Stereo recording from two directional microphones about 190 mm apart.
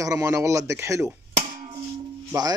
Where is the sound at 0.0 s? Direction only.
15° right (ahead or behind).